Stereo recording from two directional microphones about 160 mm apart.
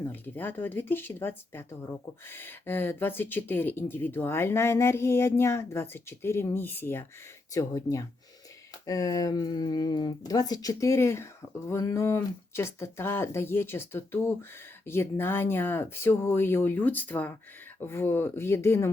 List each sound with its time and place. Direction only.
0.0 s speech: 10° left (ahead or behind)